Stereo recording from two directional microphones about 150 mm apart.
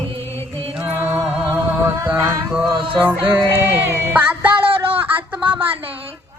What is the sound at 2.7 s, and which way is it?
Music, 35° right (ahead or behind).